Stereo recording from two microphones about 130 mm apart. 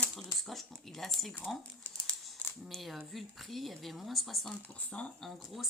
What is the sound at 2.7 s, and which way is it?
A woman's voice, centre (ahead or behind).